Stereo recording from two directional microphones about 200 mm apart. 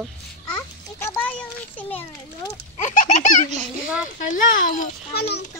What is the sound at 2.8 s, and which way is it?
A child's voice, 40° left (ahead or behind).